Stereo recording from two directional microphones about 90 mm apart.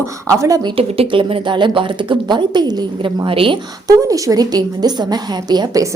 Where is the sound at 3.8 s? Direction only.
40° right (ahead or behind).